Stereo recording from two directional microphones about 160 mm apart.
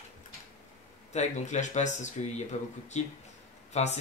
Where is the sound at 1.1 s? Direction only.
45° left (ahead or behind).